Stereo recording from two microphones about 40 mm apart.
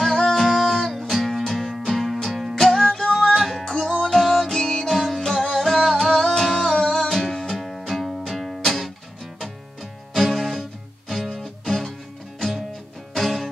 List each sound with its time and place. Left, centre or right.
0.0 s music: centre
3.3 s music: centre
3.6 s music: centre
10.1 s music: centre
12.4 s music: centre